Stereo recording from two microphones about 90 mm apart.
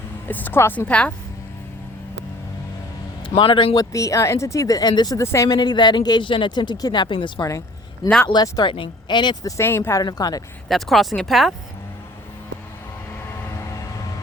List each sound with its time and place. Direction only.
0.3 s a woman's voice: 20° left (ahead or behind)
0.9 s speech: 15° left (ahead or behind)
3.2 s a man's voice: 70° left (ahead or behind)
3.8 s speech: 35° left (ahead or behind)
5.1 s speech: 30° left (ahead or behind)
5.5 s speech: 55° left (ahead or behind)
8.3 s speech: 50° left (ahead or behind)
8.7 s speech: 65° left (ahead or behind)
9.6 s a woman's voice: 25° left (ahead or behind)
10.0 s speech: 45° left (ahead or behind)
10.7 s speech: centre (ahead or behind)
13.3 s vehicle: 30° left (ahead or behind)